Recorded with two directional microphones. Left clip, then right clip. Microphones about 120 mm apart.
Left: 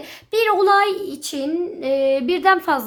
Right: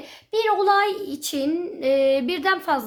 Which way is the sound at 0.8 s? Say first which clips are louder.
Left 3 dB; 20° left (ahead or behind).